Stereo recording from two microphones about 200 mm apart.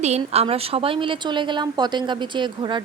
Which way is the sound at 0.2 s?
30° right (ahead or behind).